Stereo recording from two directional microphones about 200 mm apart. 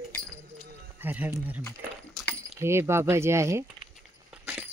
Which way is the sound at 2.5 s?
15° right (ahead or behind).